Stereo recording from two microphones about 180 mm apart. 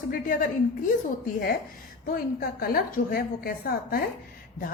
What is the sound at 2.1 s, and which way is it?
A woman's voice, 55° left (ahead or behind).